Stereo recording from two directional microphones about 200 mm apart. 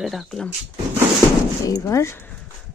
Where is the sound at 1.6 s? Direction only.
15° left (ahead or behind).